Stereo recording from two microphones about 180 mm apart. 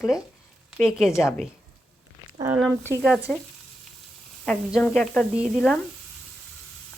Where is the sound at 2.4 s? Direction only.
10° right (ahead or behind).